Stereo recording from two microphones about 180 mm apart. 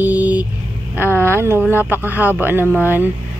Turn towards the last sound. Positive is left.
turn(degrees=-10)  # may be behind; listen again after turning